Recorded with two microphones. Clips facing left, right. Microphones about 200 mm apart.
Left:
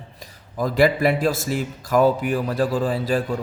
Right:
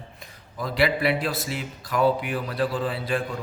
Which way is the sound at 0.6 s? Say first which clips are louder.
Left 5 dB; 45° left (ahead or behind).